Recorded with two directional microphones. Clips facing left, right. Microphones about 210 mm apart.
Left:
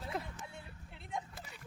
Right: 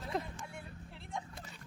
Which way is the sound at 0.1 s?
5° left (ahead or behind).